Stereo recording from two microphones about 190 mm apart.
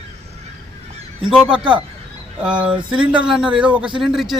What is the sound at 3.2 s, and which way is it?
A man's voice, 5° right (ahead or behind).